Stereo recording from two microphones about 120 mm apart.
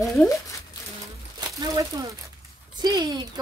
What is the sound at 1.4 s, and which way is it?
Speech, 35° right (ahead or behind).